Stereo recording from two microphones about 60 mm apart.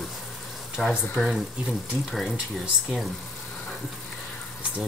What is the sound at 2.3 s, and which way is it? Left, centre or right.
Speech, centre.